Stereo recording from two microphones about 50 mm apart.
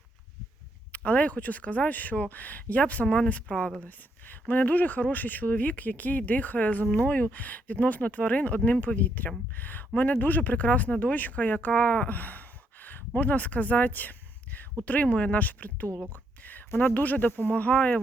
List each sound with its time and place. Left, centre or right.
0.9 s speech: left